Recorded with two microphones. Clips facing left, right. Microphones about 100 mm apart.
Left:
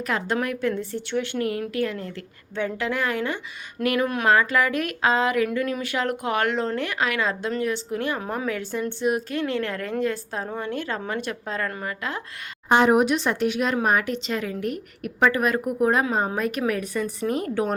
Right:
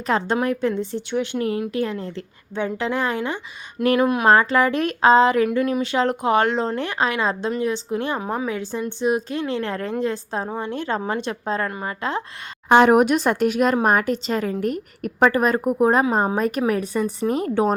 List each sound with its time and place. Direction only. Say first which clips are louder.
0.1 s a woman's voice: right 5 dB; 30° right (ahead or behind)
3.8 s a woman's voice: right 5 dB; 30° right (ahead or behind)
12.6 s a woman's voice: right 4 dB; 70° right (ahead or behind); by 17.7 s 30° right (ahead or behind)